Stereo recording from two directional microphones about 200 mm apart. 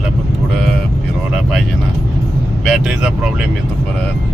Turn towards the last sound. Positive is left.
turn(degrees=0)  # may be behind; listen again after turning